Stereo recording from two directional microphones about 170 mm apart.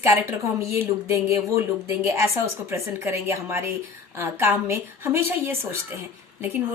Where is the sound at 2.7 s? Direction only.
15° right (ahead or behind).